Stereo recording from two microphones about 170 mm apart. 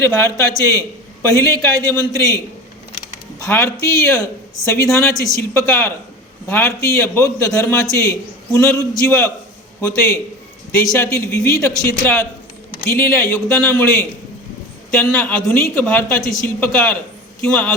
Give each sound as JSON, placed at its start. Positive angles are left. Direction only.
{"t": 0.0, "sound": "a man's voice", "side_deg": 15}
{"t": 3.4, "sound": "a man's voice", "side_deg": 15}